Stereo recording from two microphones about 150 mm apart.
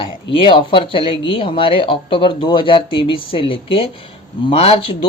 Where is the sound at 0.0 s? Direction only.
35° left (ahead or behind).